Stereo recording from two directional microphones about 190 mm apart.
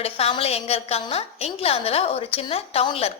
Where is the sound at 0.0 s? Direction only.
30° left (ahead or behind).